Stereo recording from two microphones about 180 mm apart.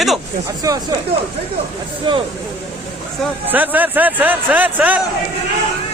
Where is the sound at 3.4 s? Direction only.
10° right (ahead or behind).